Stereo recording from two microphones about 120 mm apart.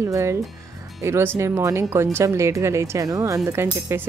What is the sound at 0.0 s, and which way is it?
Speech, 25° right (ahead or behind).